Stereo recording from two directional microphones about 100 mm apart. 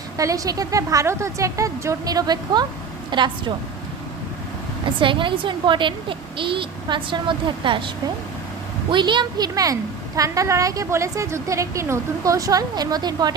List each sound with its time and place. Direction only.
0.2 s a woman's voice: 35° right (ahead or behind); by 3.3 s 50° right (ahead or behind)
4.9 s a woman's voice: 55° right (ahead or behind)
8.9 s a woman's voice: 55° right (ahead or behind)